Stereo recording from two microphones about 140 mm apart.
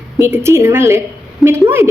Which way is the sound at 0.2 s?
20° right (ahead or behind).